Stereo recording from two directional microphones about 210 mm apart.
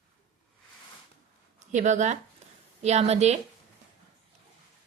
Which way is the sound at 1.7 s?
35° right (ahead or behind).